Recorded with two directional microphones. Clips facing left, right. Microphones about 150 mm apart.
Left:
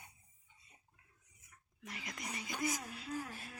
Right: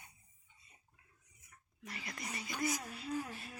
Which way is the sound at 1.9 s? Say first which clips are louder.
Even; 15° left (ahead or behind).